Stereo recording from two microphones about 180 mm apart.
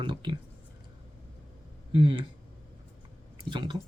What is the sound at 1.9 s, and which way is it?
Speech, 30° right (ahead or behind).